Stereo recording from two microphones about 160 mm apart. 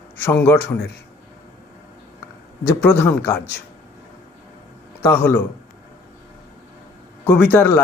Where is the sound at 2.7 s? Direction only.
10° left (ahead or behind).